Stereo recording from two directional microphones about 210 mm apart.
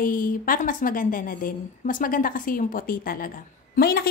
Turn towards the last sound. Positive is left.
turn(degrees=45)  # may be behind; listen again after turning